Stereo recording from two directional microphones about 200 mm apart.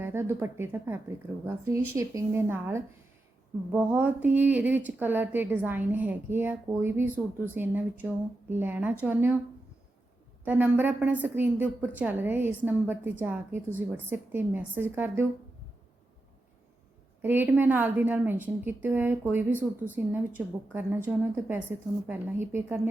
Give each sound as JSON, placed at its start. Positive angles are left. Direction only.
{"t": 0.0, "sound": "speech", "side_deg": -10}
{"t": 10.4, "sound": "speech", "side_deg": -10}
{"t": 17.2, "sound": "speech", "side_deg": -10}